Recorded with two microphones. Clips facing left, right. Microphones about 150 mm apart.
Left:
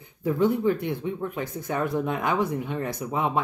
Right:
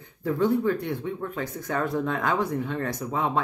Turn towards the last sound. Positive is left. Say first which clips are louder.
# even
turn(degrees=15)  # may be behind; listen again after turning